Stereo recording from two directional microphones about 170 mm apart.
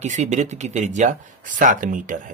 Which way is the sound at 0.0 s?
45° right (ahead or behind).